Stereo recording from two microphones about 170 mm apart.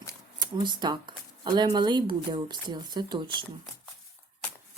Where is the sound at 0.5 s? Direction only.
25° right (ahead or behind).